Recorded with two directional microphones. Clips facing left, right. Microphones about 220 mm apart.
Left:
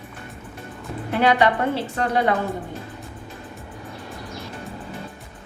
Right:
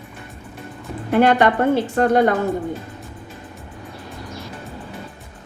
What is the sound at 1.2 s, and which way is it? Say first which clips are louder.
A woman's voice: right 3 dB; 50° right (ahead or behind).